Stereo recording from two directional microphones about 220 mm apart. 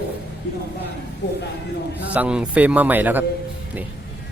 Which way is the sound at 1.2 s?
50° left (ahead or behind).